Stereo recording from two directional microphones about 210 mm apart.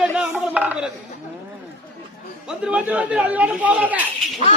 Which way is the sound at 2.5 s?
5° right (ahead or behind).